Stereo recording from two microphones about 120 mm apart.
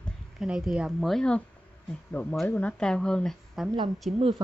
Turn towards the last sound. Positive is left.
turn(degrees=0)  # may be behind; listen again after turning